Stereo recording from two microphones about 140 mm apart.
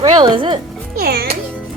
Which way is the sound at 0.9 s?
90° right.